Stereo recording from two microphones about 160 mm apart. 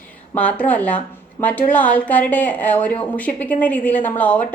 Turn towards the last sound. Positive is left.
turn(degrees=10)  # may be behind; listen again after turning